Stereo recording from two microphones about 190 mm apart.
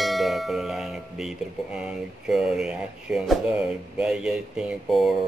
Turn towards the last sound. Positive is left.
turn(degrees=0)  # may be behind; listen again after turning